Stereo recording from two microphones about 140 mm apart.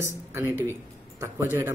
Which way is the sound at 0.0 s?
20° right (ahead or behind).